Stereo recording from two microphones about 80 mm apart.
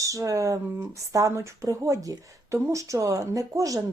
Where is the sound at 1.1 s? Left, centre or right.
Right.